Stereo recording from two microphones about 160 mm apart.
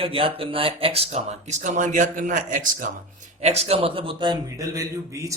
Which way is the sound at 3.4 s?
40° right (ahead or behind).